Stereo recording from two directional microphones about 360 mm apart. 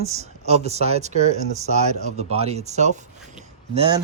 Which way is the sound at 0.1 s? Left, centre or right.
Centre.